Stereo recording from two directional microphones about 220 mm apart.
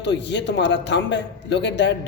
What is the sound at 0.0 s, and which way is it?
A man's voice, 50° left (ahead or behind).